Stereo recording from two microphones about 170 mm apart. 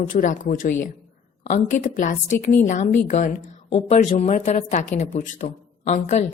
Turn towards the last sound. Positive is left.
turn(degrees=40)  # may be behind; listen again after turning